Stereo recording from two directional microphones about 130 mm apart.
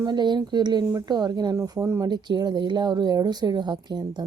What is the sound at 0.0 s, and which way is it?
A woman's voice, 35° right (ahead or behind).